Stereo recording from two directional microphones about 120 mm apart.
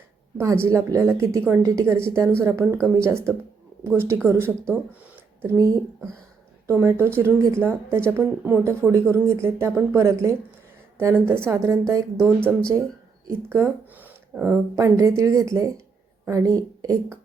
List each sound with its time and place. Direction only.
0.3 s speech: 20° right (ahead or behind)
6.7 s a woman's voice: 20° right (ahead or behind)